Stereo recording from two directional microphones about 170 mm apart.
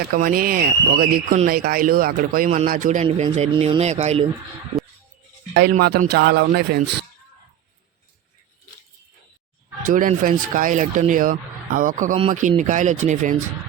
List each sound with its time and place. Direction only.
0.0 s speech: 60° right (ahead or behind)
3.5 s speech: 35° right (ahead or behind)
5.8 s speech: 70° right (ahead or behind)
9.8 s speech: 50° right (ahead or behind)